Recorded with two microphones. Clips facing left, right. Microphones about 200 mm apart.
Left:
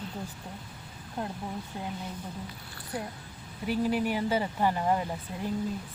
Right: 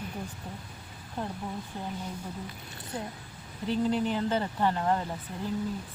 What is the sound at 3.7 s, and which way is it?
Speech, 10° left (ahead or behind).